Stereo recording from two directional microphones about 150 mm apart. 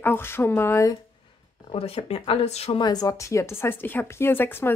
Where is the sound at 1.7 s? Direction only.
40° left (ahead or behind).